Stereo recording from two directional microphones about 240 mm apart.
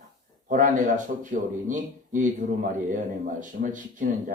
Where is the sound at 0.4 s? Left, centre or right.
Right.